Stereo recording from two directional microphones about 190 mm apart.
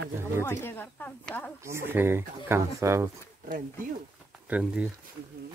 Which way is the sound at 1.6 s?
15° right (ahead or behind).